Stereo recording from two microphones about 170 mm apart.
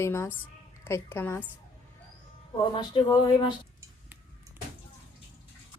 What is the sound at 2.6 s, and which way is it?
Speech, 25° left (ahead or behind).